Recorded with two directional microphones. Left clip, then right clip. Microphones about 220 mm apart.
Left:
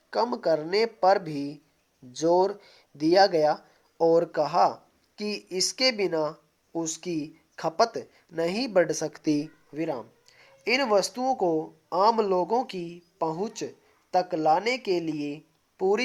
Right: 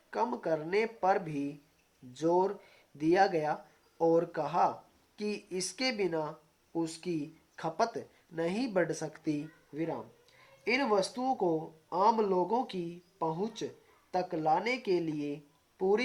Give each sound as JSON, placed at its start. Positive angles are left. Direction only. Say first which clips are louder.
{"t": 0.1, "sound": "speech", "louder": "left 7 dB", "side_deg": 40}